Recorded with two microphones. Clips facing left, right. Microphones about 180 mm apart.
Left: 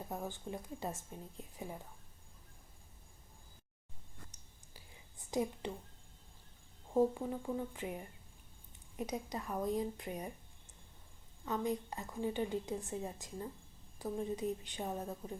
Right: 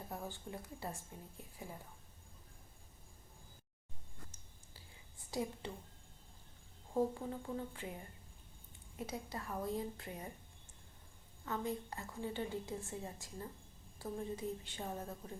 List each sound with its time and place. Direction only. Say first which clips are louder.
0.1 s a woman's voice: left 4 dB; 20° left (ahead or behind)
4.3 s a sound: left 1 dB; 20° left (ahead or behind)
6.9 s a woman's voice: left 4 dB; 15° left (ahead or behind)
11.4 s a woman's voice: left 4 dB; 20° left (ahead or behind)